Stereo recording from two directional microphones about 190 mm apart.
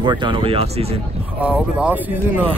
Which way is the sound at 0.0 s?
25° right (ahead or behind).